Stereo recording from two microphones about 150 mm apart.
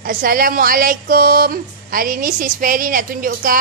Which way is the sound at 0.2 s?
70° right (ahead or behind).